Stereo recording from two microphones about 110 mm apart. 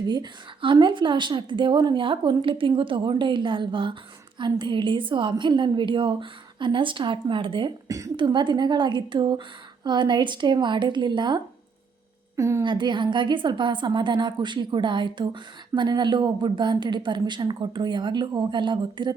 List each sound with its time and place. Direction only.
0.1 s a woman's voice: 45° right (ahead or behind)
7.9 s a woman's voice: 30° right (ahead or behind)
8.1 s a woman's voice: 45° right (ahead or behind)
12.4 s a woman's voice: 30° right (ahead or behind)
12.6 s a woman's voice: 45° right (ahead or behind)